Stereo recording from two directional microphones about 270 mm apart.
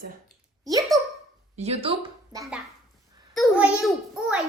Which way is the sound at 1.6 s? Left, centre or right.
Right.